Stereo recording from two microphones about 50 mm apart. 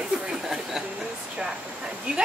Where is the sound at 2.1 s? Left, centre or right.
Centre.